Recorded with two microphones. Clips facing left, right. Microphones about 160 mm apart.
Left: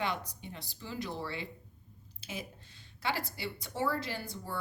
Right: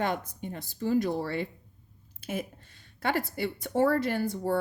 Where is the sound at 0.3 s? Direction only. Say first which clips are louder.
Right 8 dB; 50° right (ahead or behind).